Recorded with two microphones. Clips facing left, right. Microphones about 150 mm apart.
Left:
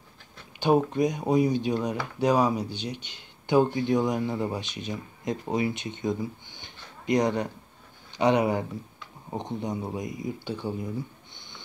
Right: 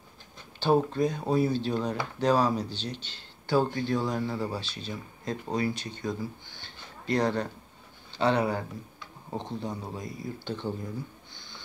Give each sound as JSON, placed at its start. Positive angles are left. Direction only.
{"t": 0.6, "sound": "speech", "side_deg": 15}
{"t": 11.3, "sound": "sniff", "side_deg": 20}